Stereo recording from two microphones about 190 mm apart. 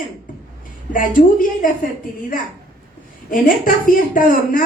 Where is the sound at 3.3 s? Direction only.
45° left (ahead or behind).